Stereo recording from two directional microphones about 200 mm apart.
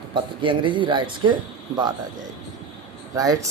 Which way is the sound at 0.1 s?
25° right (ahead or behind).